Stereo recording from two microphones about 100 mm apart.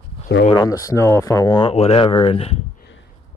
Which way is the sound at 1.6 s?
80° left.